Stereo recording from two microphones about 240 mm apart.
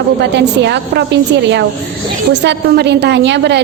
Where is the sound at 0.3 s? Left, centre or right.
Right.